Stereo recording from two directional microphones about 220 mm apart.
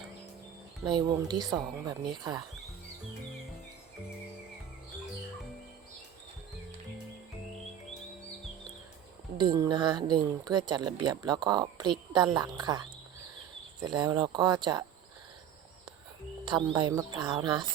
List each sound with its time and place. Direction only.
0.9 s speech: 20° right (ahead or behind)
9.4 s speech: 20° right (ahead or behind)
16.5 s speech: 20° right (ahead or behind)